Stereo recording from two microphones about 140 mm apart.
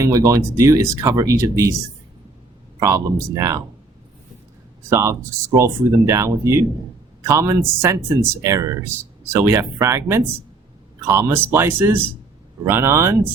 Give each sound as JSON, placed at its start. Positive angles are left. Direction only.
{"t": 0.0, "sound": "speech", "side_deg": -25}
{"t": 2.8, "sound": "speech", "side_deg": -25}
{"t": 4.9, "sound": "speech", "side_deg": -20}